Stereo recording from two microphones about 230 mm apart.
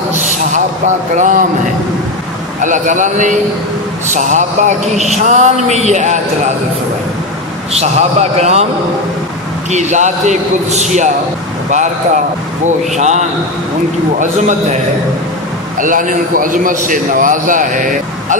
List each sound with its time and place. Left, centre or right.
0.2 s a sound: right
2.6 s speech: right
7.7 s a man's voice: right
9.7 s speech: right
12.6 s speech: right
15.8 s speech: right